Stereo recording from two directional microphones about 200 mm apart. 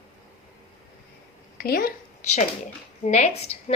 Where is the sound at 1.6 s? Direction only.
45° left (ahead or behind).